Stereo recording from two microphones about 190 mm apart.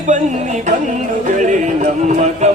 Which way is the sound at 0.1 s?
40° right (ahead or behind).